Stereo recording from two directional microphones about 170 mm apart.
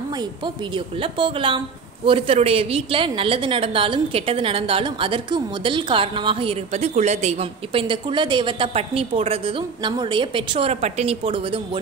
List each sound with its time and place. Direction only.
0.7 s a woman's voice: 30° right (ahead or behind)